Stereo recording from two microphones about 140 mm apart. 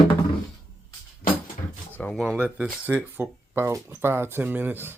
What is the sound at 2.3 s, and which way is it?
Speech, 10° right (ahead or behind).